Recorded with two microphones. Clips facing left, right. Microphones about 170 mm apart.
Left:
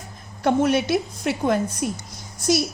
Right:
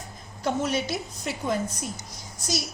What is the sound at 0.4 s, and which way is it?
A woman's voice, 60° left (ahead or behind).